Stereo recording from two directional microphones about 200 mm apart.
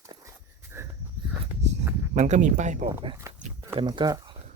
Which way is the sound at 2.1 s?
35° right (ahead or behind).